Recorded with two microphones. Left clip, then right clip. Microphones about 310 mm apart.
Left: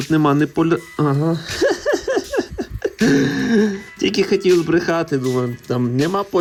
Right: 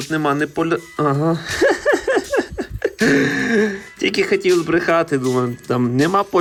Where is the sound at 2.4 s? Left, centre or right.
Centre.